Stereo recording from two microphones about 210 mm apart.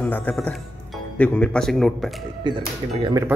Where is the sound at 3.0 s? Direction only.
15° right (ahead or behind).